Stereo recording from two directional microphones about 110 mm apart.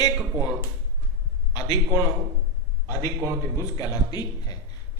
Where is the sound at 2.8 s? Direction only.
25° right (ahead or behind).